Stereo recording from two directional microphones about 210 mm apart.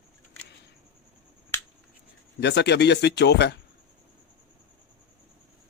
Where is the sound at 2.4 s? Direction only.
55° left (ahead or behind).